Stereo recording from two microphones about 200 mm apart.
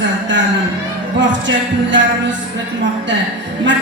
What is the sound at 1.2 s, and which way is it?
Music, 65° right (ahead or behind).